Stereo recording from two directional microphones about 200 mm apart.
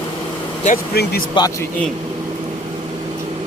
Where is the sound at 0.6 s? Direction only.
45° left (ahead or behind).